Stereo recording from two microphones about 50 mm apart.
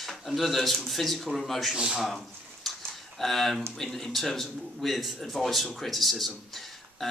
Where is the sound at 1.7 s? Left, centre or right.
Centre.